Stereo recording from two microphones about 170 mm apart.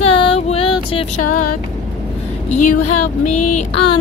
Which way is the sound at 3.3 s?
45° left (ahead or behind).